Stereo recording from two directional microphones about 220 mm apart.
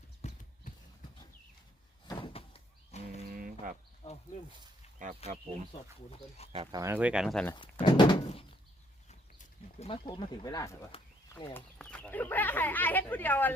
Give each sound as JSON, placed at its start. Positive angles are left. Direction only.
{"t": 0.2, "sound": "clip-clop", "side_deg": 35}
{"t": 2.0, "sound": "door", "side_deg": 25}
{"t": 3.2, "sound": "a sound", "side_deg": -40}
{"t": 4.0, "sound": "speech", "side_deg": 15}
{"t": 4.9, "sound": "speech", "side_deg": -35}
{"t": 6.1, "sound": "speech", "side_deg": 30}
{"t": 6.5, "sound": "speech", "side_deg": -20}
{"t": 7.5, "sound": "door", "side_deg": 20}
{"t": 9.8, "sound": "speech", "side_deg": 25}
{"t": 10.9, "sound": "a sound", "side_deg": 20}
{"t": 11.8, "sound": "speech", "side_deg": 5}